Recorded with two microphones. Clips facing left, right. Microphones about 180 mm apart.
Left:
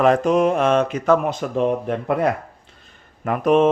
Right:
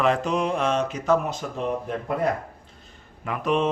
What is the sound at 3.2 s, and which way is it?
Speech, 45° left (ahead or behind).